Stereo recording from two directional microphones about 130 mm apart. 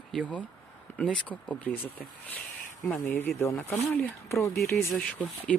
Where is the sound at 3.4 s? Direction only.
15° left (ahead or behind).